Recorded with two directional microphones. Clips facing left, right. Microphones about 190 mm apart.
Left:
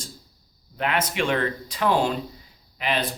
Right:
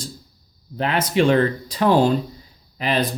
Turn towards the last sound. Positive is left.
turn(degrees=-40)  # may be behind; listen again after turning